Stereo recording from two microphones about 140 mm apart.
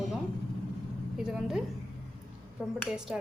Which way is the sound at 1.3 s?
5° right (ahead or behind).